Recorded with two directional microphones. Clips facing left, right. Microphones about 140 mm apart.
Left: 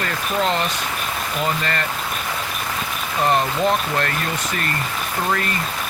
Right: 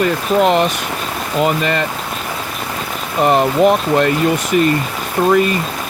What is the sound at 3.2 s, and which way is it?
Speech, 20° right (ahead or behind).